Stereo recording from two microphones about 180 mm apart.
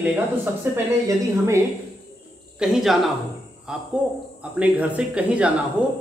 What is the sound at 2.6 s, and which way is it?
Speech, centre (ahead or behind).